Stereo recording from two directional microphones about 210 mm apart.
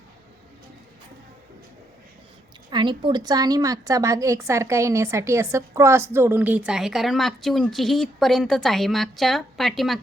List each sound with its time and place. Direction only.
2.6 s a woman's voice: 20° right (ahead or behind); by 10.0 s centre (ahead or behind)